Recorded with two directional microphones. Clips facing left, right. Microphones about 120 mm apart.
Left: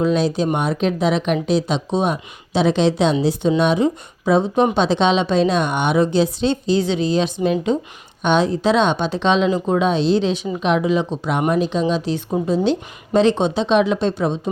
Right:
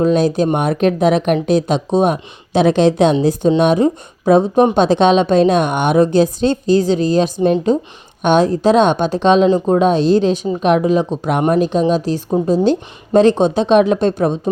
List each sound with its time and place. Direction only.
0.0 s a woman's voice: 45° right (ahead or behind)
8.2 s a woman's voice: 50° right (ahead or behind)